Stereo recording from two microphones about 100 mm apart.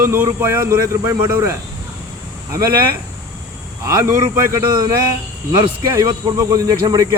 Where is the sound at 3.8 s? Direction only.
35° right (ahead or behind).